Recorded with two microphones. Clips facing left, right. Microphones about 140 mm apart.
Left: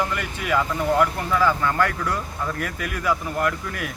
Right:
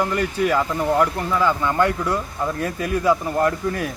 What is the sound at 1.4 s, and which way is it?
Speech, 20° right (ahead or behind).